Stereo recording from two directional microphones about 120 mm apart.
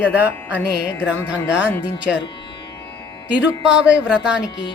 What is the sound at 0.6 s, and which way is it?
Music, 20° left (ahead or behind).